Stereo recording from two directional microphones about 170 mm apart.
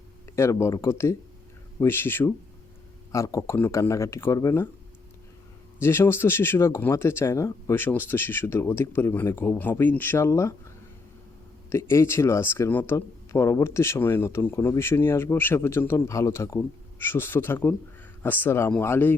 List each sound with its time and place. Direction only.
0.3 s speech: 15° left (ahead or behind)
5.8 s speech: 15° left (ahead or behind)
11.7 s speech: 15° left (ahead or behind)